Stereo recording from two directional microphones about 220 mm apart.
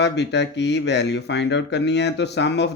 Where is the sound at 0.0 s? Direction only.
50° left (ahead or behind).